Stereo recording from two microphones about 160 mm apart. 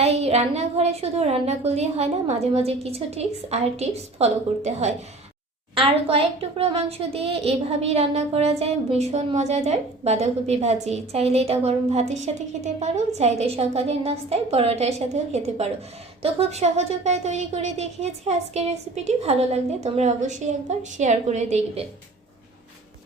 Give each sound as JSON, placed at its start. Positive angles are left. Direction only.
{"t": 0.0, "sound": "a woman's voice", "side_deg": -40}